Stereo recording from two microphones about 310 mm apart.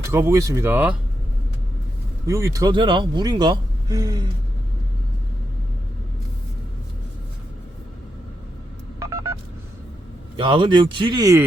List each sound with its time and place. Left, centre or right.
0.1 s speech: centre
2.2 s speech: centre
9.0 s telephone dialing: centre
10.3 s speech: centre